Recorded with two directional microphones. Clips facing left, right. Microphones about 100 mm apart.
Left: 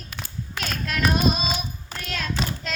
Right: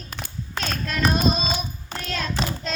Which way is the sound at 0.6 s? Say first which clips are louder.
Right 1 dB; 5° left (ahead or behind).